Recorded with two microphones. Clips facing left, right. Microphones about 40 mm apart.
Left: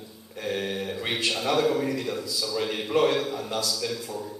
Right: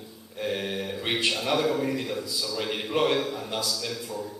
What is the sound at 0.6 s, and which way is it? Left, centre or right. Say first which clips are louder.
Speech: left 1 dB; centre.